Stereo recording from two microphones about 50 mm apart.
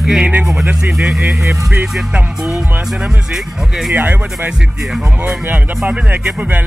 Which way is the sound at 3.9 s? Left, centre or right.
Right.